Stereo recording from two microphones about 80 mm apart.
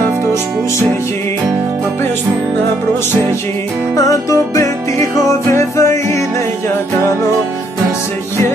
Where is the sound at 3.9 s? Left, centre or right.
Left.